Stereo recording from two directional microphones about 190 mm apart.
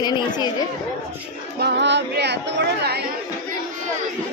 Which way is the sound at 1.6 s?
60° right (ahead or behind).